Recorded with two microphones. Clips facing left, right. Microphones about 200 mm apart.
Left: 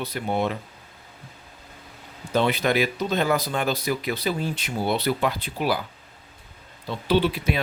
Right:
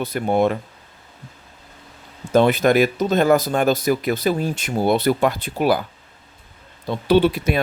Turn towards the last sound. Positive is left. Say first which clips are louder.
# right 6 dB
turn(degrees=-50)  # may be behind; listen again after turning